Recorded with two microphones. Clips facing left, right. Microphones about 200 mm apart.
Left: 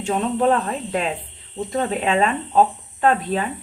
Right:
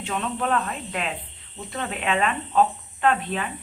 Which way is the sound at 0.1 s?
35° left (ahead or behind).